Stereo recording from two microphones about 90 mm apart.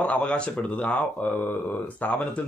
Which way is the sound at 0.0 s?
15° left (ahead or behind).